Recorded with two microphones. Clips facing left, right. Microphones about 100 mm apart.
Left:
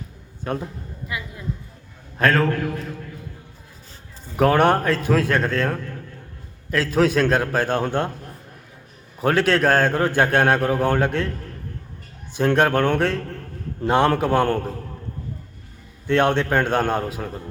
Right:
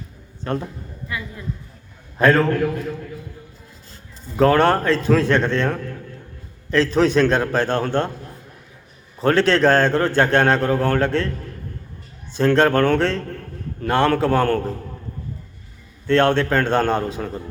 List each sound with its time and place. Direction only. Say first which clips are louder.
0.4 s a man's voice: right 2 dB; 5° left (ahead or behind)
2.1 s a man's voice: right 3 dB; centre (ahead or behind)
4.4 s a man's voice: right 1 dB; 10° left (ahead or behind)
9.1 s a man's voice: right 2 dB; 10° left (ahead or behind)
12.3 s a man's voice: right 2 dB; 15° left (ahead or behind)
16.0 s a man's voice: right 2 dB; 15° left (ahead or behind)